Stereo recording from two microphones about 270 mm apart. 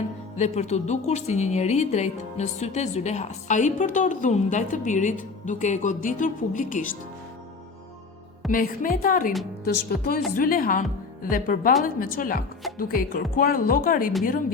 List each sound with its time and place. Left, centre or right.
0.3 s speech: left
8.4 s a woman's voice: left